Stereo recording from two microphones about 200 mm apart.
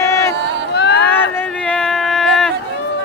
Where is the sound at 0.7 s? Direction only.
55° left (ahead or behind).